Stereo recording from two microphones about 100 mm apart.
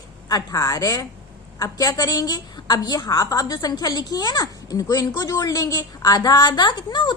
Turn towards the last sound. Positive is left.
turn(degrees=45)  # may be behind; listen again after turning